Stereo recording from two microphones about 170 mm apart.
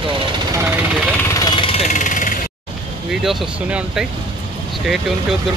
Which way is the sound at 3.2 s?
5° right (ahead or behind).